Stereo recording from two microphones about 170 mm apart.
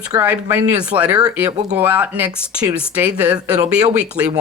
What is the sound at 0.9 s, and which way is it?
Speech, 30° right (ahead or behind).